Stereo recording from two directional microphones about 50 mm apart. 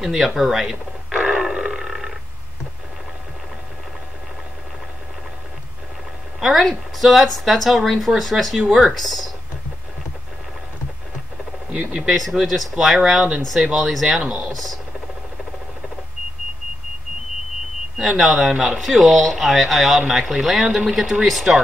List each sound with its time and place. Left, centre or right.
0.0 s speech: centre
1.4 s roar: centre
6.4 s speech: centre
8.5 s speech: centre
8.9 s speech: centre
11.9 s speech: centre
14.2 s speech: centre
14.5 s speech: centre
17.9 s a sound: centre
18.2 s speech: centre